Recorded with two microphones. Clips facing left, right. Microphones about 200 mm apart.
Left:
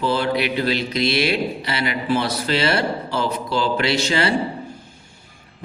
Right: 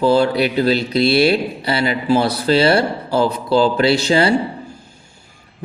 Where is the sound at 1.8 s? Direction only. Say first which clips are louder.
Right 5 dB; 30° right (ahead or behind).